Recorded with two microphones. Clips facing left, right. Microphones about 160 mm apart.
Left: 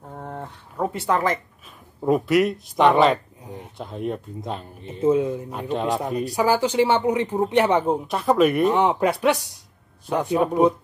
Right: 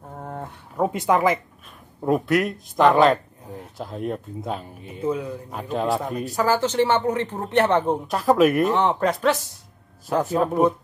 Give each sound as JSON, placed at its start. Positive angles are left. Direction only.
{"t": 0.1, "sound": "a sound", "side_deg": -5}
{"t": 0.4, "sound": "speech", "side_deg": -15}
{"t": 2.0, "sound": "speech", "side_deg": 0}
{"t": 4.8, "sound": "speech", "side_deg": 25}
{"t": 5.5, "sound": "speech", "side_deg": 0}
{"t": 6.2, "sound": "speech", "side_deg": 10}
{"t": 8.7, "sound": "speech", "side_deg": 10}